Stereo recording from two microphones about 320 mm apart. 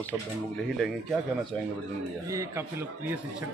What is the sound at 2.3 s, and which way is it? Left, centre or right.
Speech, centre.